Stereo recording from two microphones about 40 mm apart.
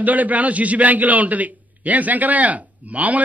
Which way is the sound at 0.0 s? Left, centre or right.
Right.